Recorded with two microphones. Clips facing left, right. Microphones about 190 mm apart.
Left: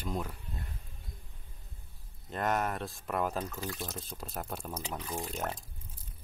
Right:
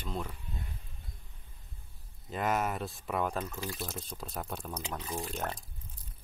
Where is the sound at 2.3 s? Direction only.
Centre (ahead or behind).